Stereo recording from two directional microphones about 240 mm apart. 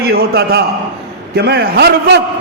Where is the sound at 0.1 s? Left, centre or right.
Right.